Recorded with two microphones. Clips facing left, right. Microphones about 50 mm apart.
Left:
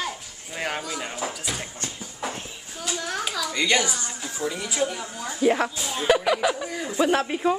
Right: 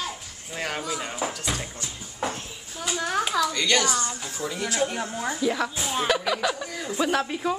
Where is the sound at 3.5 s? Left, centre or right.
Centre.